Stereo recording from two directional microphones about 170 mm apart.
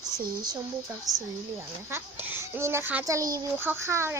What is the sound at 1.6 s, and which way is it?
A child's voice, 15° right (ahead or behind).